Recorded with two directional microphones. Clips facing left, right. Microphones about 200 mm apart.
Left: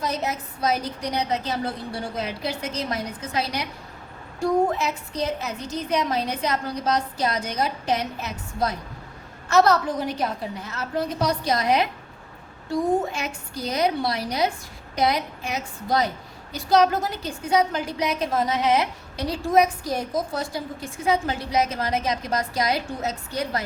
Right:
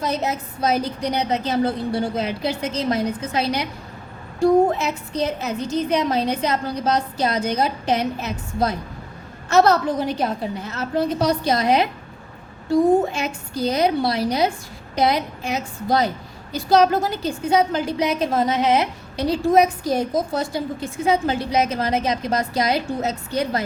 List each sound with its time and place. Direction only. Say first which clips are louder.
0.0 s a woman's voice: right 4 dB; 25° right (ahead or behind)
13.1 s a woman's voice: right 4 dB; 25° right (ahead or behind)